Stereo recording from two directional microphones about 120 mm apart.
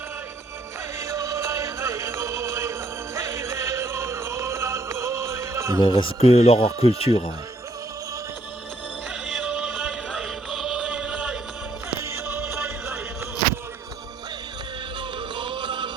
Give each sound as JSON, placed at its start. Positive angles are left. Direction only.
{"t": 0.9, "sound": "music", "side_deg": -25}
{"t": 5.8, "sound": "speech", "side_deg": 45}
{"t": 9.2, "sound": "music", "side_deg": -5}
{"t": 11.9, "sound": "music", "side_deg": -20}
{"t": 15.4, "sound": "music", "side_deg": -45}